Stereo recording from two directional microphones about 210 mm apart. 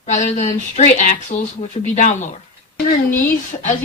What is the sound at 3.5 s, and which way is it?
Speech, 35° left (ahead or behind).